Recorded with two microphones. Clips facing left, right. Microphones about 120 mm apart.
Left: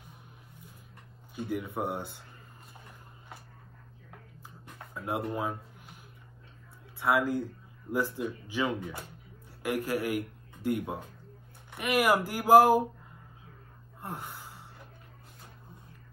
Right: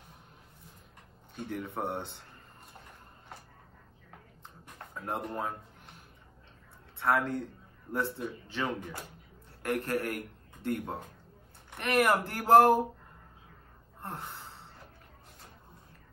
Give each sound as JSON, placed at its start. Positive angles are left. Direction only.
{"t": 1.3, "sound": "speech", "side_deg": 10}
{"t": 4.7, "sound": "a sound", "side_deg": 10}
{"t": 7.0, "sound": "a man's voice", "side_deg": 10}
{"t": 14.0, "sound": "gasp", "side_deg": 10}